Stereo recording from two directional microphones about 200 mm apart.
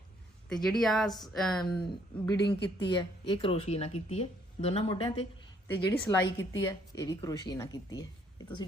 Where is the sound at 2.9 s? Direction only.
25° left (ahead or behind).